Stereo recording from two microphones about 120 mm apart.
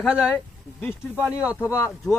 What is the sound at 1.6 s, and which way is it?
Speech, 25° left (ahead or behind).